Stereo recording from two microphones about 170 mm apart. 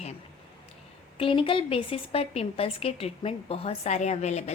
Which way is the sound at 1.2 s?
30° left (ahead or behind).